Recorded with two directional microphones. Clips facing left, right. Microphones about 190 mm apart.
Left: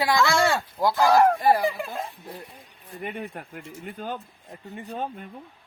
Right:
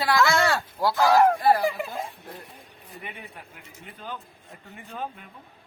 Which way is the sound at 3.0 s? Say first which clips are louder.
Left 9 dB; 50° left (ahead or behind).